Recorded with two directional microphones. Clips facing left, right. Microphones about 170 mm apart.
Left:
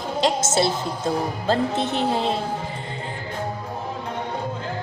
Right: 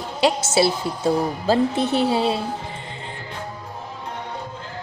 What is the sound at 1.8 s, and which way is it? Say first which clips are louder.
Speech: right 4 dB; 20° left (ahead or behind).